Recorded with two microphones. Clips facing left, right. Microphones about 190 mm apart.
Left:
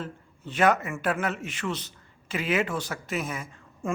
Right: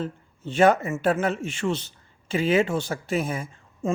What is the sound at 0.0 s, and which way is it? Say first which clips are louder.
A man's voice: right 6 dB; 30° right (ahead or behind).